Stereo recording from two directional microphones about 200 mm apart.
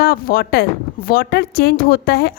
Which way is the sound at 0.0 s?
45° left (ahead or behind).